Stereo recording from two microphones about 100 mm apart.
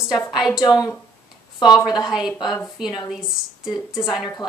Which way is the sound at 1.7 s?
Centre (ahead or behind).